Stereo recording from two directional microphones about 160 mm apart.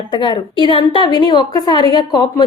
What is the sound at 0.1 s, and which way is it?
A woman's voice, 30° left (ahead or behind).